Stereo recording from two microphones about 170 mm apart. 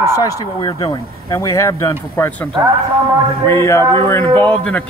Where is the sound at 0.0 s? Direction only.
20° left (ahead or behind).